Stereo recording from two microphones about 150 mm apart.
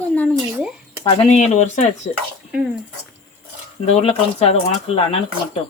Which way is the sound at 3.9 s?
40° left (ahead or behind).